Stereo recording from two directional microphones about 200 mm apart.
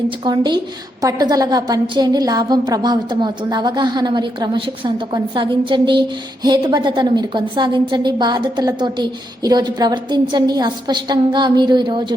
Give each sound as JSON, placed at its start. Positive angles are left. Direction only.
{"t": 0.3, "sound": "a woman's voice", "side_deg": -20}